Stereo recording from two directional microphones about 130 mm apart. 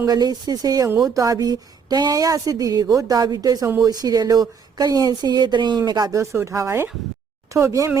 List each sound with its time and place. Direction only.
0.0 s speech: 30° right (ahead or behind)